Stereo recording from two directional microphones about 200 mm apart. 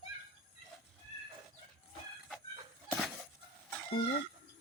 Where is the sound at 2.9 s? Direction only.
Centre (ahead or behind).